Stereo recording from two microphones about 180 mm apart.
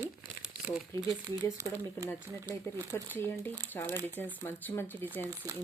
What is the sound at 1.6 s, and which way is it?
Speech, 15° right (ahead or behind).